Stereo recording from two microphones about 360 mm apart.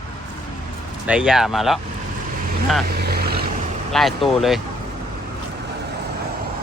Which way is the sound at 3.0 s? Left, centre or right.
Right.